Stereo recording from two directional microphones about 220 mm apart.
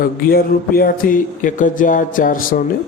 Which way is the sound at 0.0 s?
40° left (ahead or behind).